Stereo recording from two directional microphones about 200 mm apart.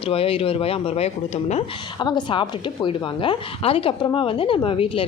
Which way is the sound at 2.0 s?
20° left (ahead or behind).